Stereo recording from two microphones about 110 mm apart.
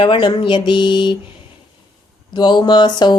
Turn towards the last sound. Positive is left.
turn(degrees=40)  # may be behind; listen again after turning